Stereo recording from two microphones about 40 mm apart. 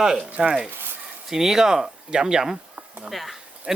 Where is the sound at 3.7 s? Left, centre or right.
Centre.